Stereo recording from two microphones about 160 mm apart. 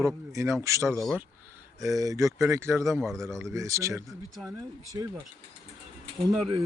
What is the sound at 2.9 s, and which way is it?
Speech, centre (ahead or behind).